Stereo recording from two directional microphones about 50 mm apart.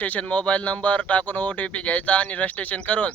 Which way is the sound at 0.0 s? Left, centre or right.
Left.